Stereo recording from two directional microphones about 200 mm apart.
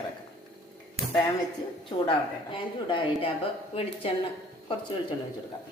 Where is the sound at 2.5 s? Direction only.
25° left (ahead or behind).